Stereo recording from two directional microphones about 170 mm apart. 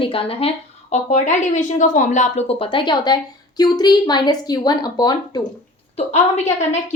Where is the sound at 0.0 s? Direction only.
30° left (ahead or behind).